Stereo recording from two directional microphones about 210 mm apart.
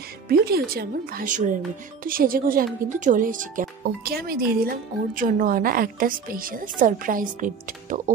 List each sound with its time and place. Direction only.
0.3 s speech: 45° right (ahead or behind)